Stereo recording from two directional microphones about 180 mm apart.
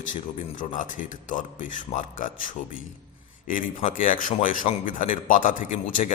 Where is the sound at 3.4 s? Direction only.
45° left (ahead or behind).